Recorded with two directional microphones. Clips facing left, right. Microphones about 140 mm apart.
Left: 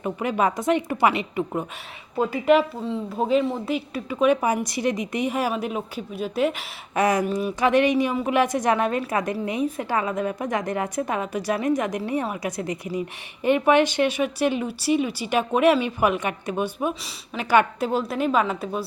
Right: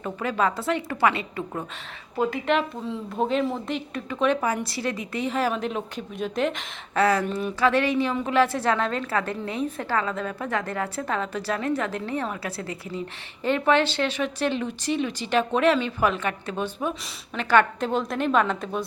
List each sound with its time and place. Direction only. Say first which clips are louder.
0.0 s a woman's voice: left 2 dB; 15° left (ahead or behind)
2.3 s a woman's voice: left 6 dB; 5° left (ahead or behind)